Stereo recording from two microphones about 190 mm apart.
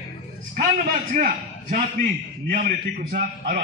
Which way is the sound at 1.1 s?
45° right (ahead or behind).